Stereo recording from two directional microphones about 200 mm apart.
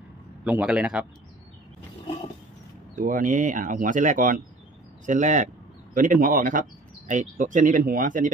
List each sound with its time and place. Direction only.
0.4 s a man's voice: 5° right (ahead or behind)
3.0 s speech: 40° right (ahead or behind)